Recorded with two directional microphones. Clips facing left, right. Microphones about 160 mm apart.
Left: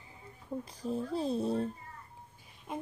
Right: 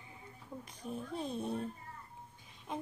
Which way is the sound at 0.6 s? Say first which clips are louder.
Left 7 dB; 35° left (ahead or behind).